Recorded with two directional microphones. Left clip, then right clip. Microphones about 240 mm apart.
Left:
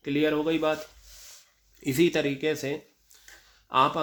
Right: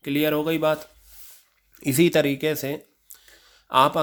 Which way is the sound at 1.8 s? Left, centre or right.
Right.